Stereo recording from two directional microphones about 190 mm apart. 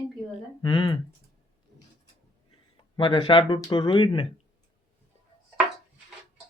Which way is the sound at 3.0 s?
25° left (ahead or behind).